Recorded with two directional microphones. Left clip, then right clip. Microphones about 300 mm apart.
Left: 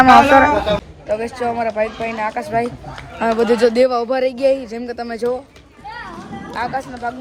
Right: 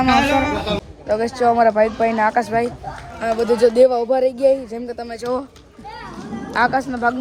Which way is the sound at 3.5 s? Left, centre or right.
Left.